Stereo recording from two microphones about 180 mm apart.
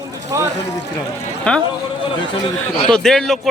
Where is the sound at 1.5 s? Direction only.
5° left (ahead or behind).